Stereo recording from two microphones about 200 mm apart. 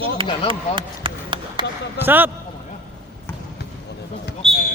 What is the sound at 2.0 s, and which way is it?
Speech, 10° right (ahead or behind).